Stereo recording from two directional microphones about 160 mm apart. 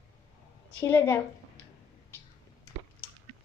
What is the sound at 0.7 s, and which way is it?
Speech, 15° left (ahead or behind).